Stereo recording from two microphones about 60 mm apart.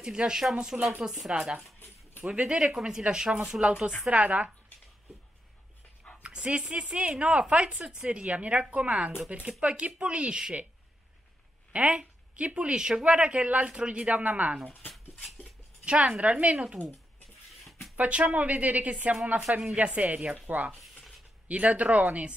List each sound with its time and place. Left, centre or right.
0.0 s a woman's voice: centre
6.2 s a woman's voice: centre
11.7 s speech: right
15.8 s a woman's voice: centre
16.8 s speech: left
17.9 s speech: right
19.6 s a woman's voice: centre
19.9 s speech: right